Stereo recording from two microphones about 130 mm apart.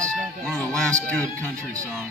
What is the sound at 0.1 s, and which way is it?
Music, 5° left (ahead or behind).